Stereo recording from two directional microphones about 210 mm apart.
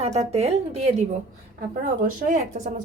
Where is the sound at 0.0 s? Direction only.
30° right (ahead or behind).